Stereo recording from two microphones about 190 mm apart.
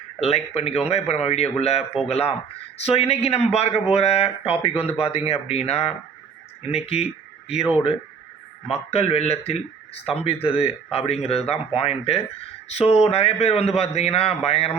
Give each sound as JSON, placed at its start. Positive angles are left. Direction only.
{"t": 0.2, "sound": "speech", "side_deg": 35}
{"t": 8.9, "sound": "speech", "side_deg": 35}